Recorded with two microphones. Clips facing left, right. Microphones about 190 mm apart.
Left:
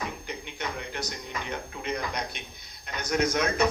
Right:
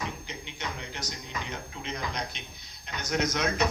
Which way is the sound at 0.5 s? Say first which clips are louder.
Left 4 dB; 60° left (ahead or behind).